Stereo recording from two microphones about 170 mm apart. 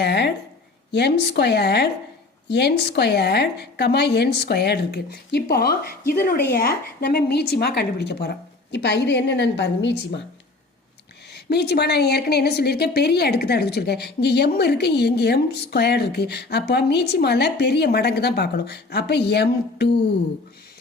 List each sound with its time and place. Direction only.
0.0 s a woman's voice: 80° left
11.3 s a woman's voice: 75° left (ahead or behind)